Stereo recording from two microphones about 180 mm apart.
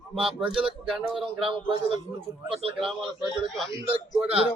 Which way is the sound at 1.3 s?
30° right (ahead or behind).